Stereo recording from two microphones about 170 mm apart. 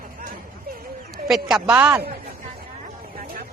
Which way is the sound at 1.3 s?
5° right (ahead or behind).